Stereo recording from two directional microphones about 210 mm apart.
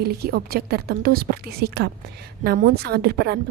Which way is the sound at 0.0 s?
50° right (ahead or behind).